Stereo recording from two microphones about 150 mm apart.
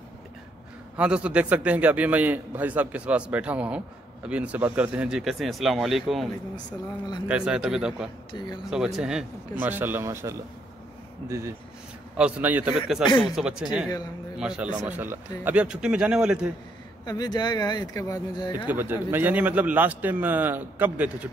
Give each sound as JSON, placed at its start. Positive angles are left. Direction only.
{"t": 0.9, "sound": "a man's voice", "side_deg": -10}
{"t": 8.3, "sound": "speech", "side_deg": 30}
{"t": 8.6, "sound": "a man's voice", "side_deg": -5}
{"t": 12.2, "sound": "a man's voice", "side_deg": -10}
{"t": 17.0, "sound": "speech", "side_deg": 25}
{"t": 18.7, "sound": "a man's voice", "side_deg": -15}